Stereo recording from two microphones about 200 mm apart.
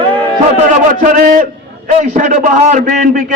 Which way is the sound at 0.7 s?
40° right (ahead or behind).